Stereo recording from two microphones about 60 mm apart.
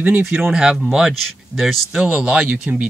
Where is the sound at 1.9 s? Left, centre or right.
Centre.